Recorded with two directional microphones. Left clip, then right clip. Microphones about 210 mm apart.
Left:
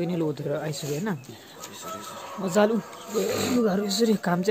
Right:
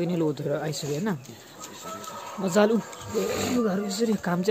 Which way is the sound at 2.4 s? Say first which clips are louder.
Even; 10° right (ahead or behind).